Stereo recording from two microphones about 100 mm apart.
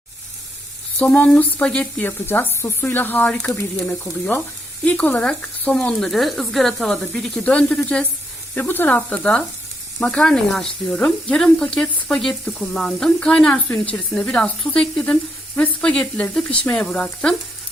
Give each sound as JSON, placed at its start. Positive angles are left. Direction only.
{"t": 1.0, "sound": "speech", "side_deg": 15}
{"t": 2.0, "sound": "speech", "side_deg": 20}